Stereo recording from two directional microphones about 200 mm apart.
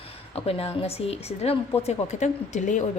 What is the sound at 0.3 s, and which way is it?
A woman's voice, 30° left (ahead or behind).